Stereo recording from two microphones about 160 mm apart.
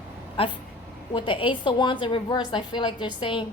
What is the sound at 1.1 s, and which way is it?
A woman's voice, 30° left (ahead or behind).